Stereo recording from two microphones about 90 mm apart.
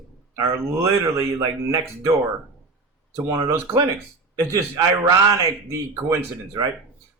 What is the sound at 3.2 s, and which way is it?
Speech, 35° right (ahead or behind).